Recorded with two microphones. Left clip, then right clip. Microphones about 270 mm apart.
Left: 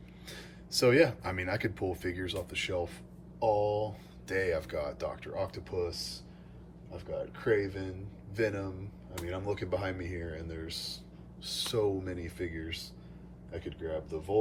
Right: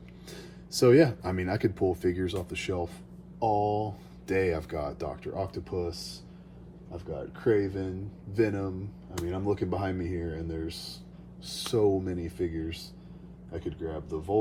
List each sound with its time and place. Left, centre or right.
0.3 s speech: centre